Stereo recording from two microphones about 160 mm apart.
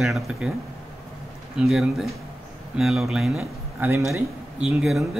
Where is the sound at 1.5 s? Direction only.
5° right (ahead or behind).